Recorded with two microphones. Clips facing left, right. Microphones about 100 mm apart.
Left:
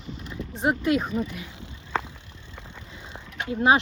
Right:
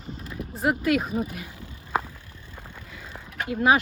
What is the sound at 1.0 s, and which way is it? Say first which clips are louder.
Speech: even; 40° right (ahead or behind).